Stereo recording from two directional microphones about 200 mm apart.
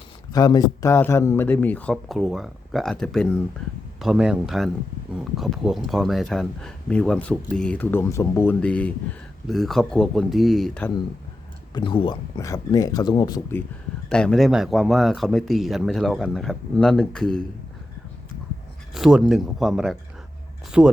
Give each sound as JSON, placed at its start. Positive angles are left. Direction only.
{"t": 0.3, "sound": "speech", "side_deg": 20}
{"t": 11.7, "sound": "speech", "side_deg": 25}
{"t": 14.1, "sound": "speech", "side_deg": 5}
{"t": 18.9, "sound": "speech", "side_deg": -5}